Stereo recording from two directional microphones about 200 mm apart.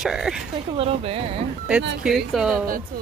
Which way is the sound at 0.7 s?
30° right (ahead or behind).